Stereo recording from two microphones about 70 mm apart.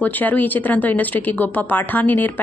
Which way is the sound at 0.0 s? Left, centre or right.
Left.